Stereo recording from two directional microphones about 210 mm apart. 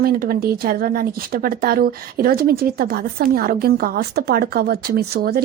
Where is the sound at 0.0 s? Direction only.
45° right (ahead or behind).